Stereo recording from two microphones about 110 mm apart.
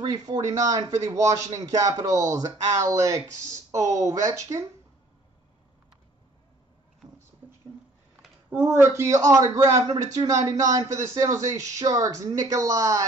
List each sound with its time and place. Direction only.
0.0 s a man's voice: 35° right (ahead or behind)
8.5 s a man's voice: 20° right (ahead or behind)